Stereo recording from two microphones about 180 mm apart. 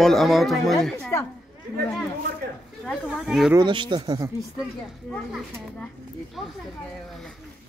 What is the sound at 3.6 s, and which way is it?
Speech, 25° right (ahead or behind).